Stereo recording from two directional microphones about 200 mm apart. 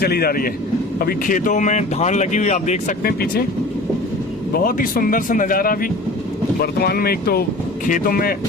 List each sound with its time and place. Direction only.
0.0 s speech: 50° left (ahead or behind)
4.5 s speech: 45° left (ahead or behind)